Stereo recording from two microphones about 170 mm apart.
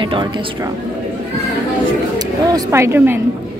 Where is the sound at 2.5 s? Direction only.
15° right (ahead or behind).